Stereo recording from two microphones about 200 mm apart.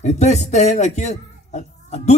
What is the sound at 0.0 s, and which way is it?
Speech, 35° left (ahead or behind).